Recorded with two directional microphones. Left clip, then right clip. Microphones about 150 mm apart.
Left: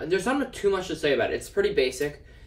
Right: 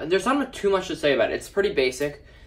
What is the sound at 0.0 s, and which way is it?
Speech, 55° right (ahead or behind).